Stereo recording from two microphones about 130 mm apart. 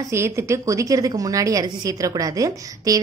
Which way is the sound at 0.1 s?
20° right (ahead or behind).